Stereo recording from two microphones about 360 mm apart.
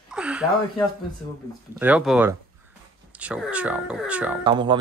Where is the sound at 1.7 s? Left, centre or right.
Centre.